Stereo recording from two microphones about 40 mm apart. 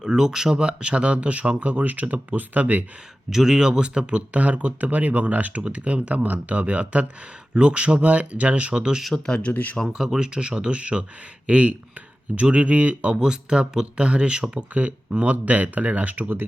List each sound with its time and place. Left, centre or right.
0.0 s speech: centre
0.5 s speech: right
3.2 s speech: centre
4.4 s speech: right
9.1 s speech: left
9.4 s speech: left
10.2 s speech: right
13.1 s speech: centre; by 16.2 s right
16.2 s speech: right